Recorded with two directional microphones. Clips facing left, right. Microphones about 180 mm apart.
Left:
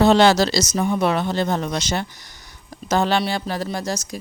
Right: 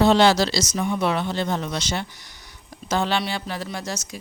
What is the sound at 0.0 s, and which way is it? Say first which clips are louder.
Speech: left 2 dB; 45° left (ahead or behind).